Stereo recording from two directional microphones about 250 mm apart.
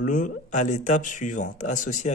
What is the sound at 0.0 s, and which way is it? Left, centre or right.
Speech, left.